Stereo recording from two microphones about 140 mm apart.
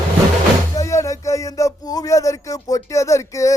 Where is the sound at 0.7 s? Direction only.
20° left (ahead or behind).